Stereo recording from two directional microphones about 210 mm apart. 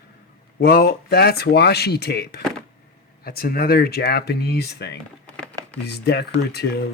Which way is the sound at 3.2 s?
45° left (ahead or behind).